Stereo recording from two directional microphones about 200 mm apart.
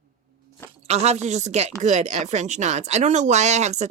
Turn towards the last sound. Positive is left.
turn(degrees=-35)  # may be behind; listen again after turning